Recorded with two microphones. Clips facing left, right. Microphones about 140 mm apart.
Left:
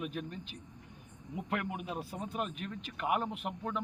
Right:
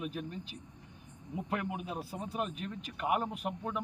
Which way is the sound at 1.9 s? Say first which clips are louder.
Even; 10° right (ahead or behind).